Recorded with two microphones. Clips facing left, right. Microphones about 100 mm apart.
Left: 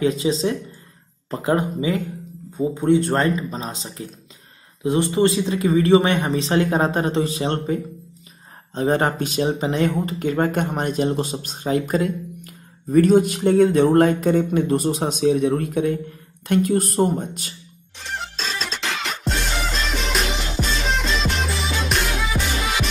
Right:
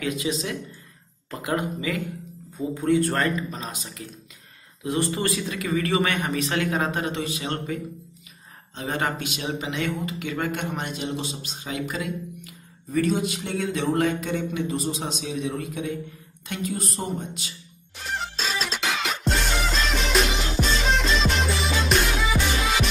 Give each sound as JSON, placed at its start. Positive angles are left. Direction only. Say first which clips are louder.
{"t": 0.0, "sound": "speech", "louder": "left 7 dB", "side_deg": 30}
{"t": 17.9, "sound": "music", "louder": "even", "side_deg": 0}